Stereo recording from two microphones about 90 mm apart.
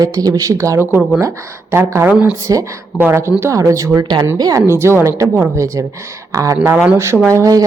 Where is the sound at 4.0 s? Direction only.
55° right (ahead or behind).